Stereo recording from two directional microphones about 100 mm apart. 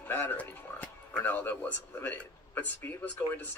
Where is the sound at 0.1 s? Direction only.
20° left (ahead or behind).